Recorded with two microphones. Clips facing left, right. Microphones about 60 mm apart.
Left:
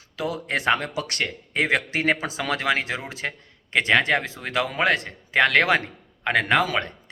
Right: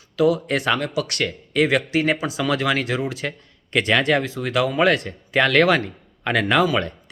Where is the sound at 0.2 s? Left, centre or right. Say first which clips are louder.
Right 8 dB; left.